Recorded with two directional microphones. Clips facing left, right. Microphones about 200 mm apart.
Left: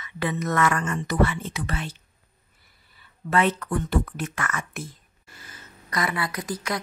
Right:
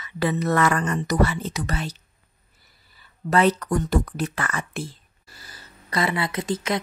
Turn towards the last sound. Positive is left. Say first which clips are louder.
# right 4 dB
turn(degrees=-25)  # may be behind; listen again after turning